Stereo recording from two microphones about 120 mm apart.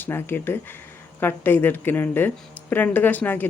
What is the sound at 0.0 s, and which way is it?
Speech, 20° left (ahead or behind).